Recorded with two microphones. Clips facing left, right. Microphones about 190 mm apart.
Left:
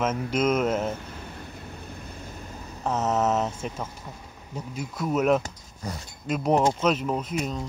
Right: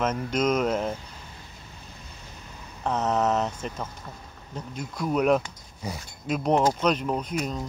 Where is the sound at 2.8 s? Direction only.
5° left (ahead or behind).